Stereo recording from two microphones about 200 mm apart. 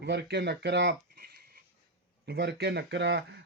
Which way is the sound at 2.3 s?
55° right (ahead or behind).